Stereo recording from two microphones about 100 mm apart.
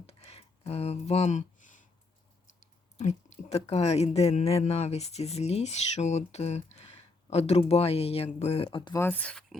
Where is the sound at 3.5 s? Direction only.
90° left; by 8.9 s 55° left (ahead or behind).